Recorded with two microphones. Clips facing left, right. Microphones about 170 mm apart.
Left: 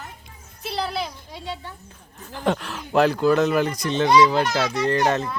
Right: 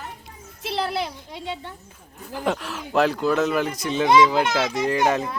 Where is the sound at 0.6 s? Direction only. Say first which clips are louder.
Right 1 dB; 20° right (ahead or behind).